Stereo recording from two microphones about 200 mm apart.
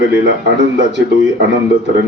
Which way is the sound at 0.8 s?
65° right (ahead or behind).